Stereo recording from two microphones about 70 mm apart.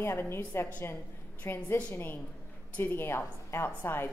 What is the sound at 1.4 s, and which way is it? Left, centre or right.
A woman's voice, left.